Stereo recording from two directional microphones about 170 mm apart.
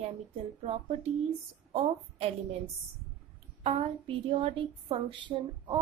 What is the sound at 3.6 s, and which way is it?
Speech, 35° right (ahead or behind).